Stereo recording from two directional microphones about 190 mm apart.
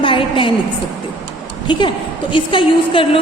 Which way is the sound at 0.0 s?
25° left (ahead or behind).